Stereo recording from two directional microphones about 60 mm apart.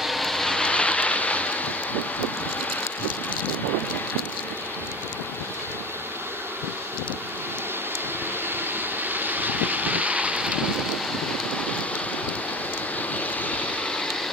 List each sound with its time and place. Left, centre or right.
0.0 s vehicle: centre; by 1.7 s left
9.1 s wind: right
13.1 s vehicle: left